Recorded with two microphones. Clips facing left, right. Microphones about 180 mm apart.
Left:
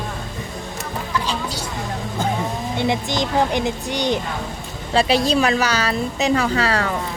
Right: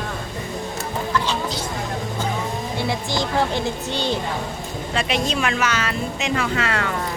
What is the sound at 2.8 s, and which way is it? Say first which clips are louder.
Speech: left 4 dB; 20° left (ahead or behind).